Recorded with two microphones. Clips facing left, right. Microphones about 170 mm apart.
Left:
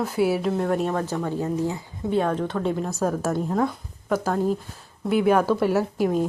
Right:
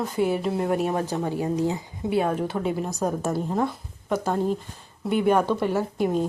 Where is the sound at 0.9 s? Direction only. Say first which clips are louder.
Even; 20° right (ahead or behind).